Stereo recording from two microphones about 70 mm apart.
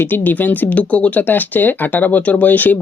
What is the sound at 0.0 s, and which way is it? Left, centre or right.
Speech, left.